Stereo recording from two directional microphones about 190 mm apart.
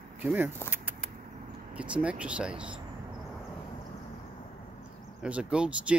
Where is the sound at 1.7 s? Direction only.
5° right (ahead or behind).